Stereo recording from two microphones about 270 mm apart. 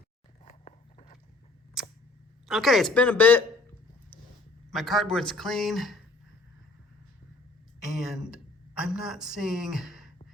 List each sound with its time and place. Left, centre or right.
0.4 s biting: left
1.8 s camera: centre
2.5 s speech: centre
4.7 s speech: centre
7.9 s speech: centre